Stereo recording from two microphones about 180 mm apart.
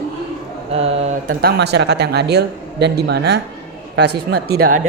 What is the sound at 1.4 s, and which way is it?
A man's voice, 65° right (ahead or behind).